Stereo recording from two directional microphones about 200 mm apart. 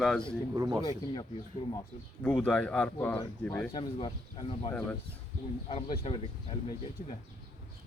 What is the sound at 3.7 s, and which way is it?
Speech, 25° left (ahead or behind).